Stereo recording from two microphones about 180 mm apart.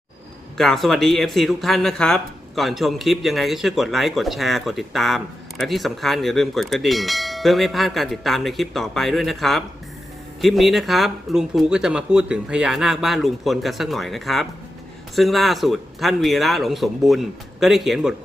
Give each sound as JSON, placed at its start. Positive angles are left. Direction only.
{"t": 0.5, "sound": "speech", "side_deg": 0}